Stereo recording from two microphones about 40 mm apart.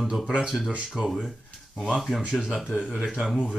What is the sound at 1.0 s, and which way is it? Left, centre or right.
Speech, right.